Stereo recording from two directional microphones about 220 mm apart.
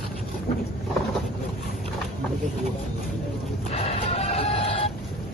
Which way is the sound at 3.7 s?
25° left (ahead or behind).